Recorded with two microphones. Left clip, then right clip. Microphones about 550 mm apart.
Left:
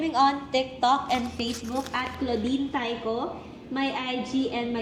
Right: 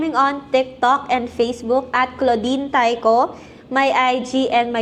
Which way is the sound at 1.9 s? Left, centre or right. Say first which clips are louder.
Right 10 dB; right.